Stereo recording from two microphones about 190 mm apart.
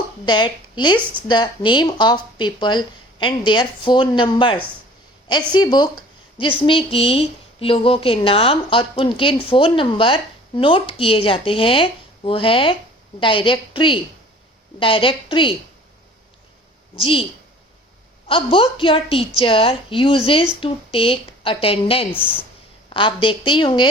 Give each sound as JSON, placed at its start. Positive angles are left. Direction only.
{"t": 0.3, "sound": "speech", "side_deg": 25}
{"t": 5.5, "sound": "speech", "side_deg": 20}
{"t": 16.9, "sound": "speech", "side_deg": 30}
{"t": 18.3, "sound": "speech", "side_deg": 30}